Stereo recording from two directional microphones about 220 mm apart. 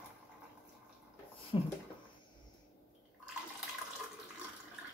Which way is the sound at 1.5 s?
25° left (ahead or behind).